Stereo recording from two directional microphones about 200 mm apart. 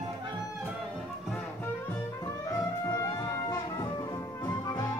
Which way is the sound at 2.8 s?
20° left (ahead or behind).